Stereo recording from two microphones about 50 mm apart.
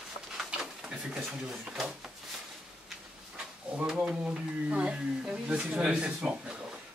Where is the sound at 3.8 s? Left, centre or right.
Centre.